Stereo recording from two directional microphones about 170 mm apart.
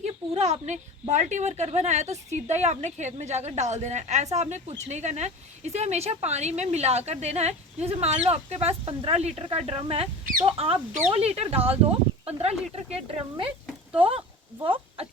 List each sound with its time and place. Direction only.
0.0 s a woman's voice: 40° right (ahead or behind)
14.6 s speech: 30° right (ahead or behind)